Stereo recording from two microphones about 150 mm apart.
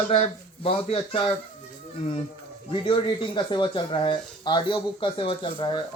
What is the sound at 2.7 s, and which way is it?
Speech, 35° left (ahead or behind).